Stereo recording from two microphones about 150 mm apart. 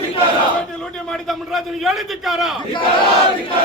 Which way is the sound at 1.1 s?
Centre (ahead or behind).